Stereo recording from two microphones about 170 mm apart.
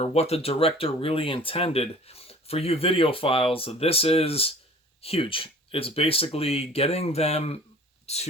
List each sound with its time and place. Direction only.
0.0 s speech: 40° left (ahead or behind)